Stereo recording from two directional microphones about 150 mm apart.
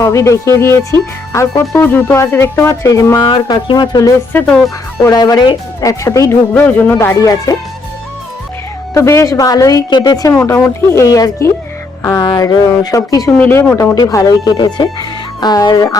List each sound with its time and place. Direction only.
0.0 s speech: 20° left (ahead or behind)
4.3 s speech: 10° left (ahead or behind)
5.1 s speech: 25° left (ahead or behind)
6.5 s speech: 10° left (ahead or behind)
9.0 s speech: 20° left (ahead or behind)